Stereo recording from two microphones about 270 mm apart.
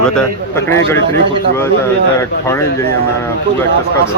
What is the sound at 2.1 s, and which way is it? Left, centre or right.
Speech, centre.